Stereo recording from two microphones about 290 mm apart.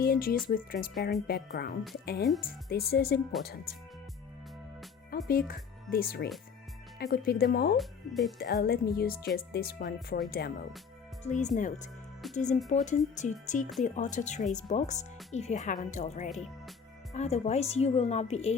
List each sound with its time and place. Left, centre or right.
0.0 s speech: left
5.1 s speech: left
7.8 s speech: centre
8.4 s speech: left
11.2 s speech: left